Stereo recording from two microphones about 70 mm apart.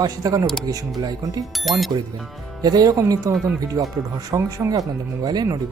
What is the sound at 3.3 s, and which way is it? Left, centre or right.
Speech, right.